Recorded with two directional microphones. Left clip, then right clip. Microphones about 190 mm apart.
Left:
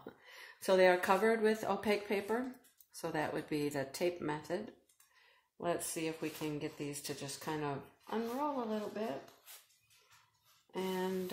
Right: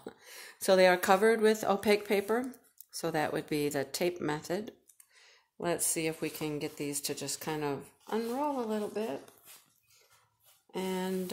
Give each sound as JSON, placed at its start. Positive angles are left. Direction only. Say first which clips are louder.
{"t": 0.0, "sound": "speech", "louder": "right 5 dB", "side_deg": -55}
{"t": 10.7, "sound": "speech", "louder": "right 3 dB", "side_deg": -55}